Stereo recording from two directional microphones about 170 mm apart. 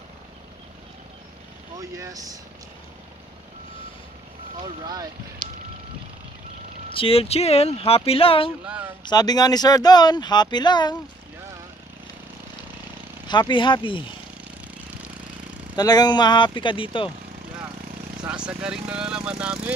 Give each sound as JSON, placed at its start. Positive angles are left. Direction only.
{"t": 1.8, "sound": "speech", "side_deg": -20}
{"t": 4.6, "sound": "speech", "side_deg": -25}
{"t": 6.9, "sound": "speech", "side_deg": 35}
{"t": 8.6, "sound": "speech", "side_deg": -10}
{"t": 9.0, "sound": "speech", "side_deg": 25}
{"t": 13.3, "sound": "speech", "side_deg": 25}
{"t": 15.7, "sound": "speech", "side_deg": 25}
{"t": 18.3, "sound": "speech", "side_deg": -5}